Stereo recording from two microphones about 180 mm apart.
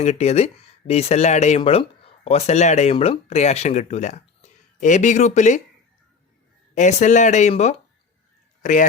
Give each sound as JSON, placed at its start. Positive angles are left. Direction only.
{"t": 0.0, "sound": "speech", "side_deg": 35}
{"t": 6.7, "sound": "speech", "side_deg": 40}